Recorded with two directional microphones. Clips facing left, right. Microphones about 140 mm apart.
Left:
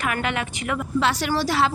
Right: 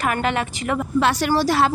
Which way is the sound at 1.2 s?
45° right (ahead or behind).